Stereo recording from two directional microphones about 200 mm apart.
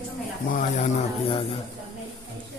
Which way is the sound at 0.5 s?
40° left (ahead or behind).